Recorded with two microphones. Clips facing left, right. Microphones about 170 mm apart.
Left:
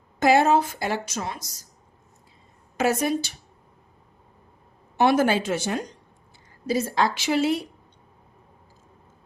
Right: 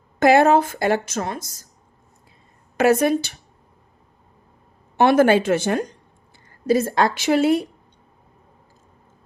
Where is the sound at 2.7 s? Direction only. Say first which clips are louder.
Right 6 dB; 60° right (ahead or behind).